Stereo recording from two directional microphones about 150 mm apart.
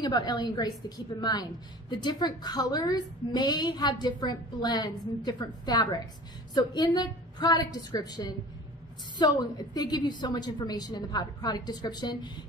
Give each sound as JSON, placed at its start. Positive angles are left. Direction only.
{"t": 0.0, "sound": "a woman's voice", "side_deg": 25}